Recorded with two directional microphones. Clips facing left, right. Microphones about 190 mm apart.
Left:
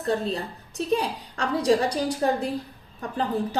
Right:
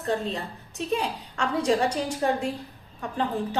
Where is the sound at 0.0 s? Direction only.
35° left (ahead or behind).